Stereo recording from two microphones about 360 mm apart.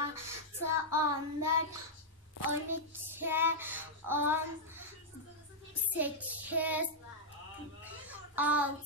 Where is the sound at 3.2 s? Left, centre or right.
Centre.